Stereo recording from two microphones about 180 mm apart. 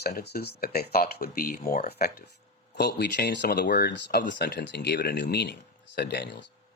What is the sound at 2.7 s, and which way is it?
Speech, 70° left (ahead or behind).